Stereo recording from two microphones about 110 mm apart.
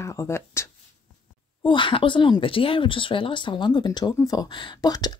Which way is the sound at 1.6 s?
50° left (ahead or behind).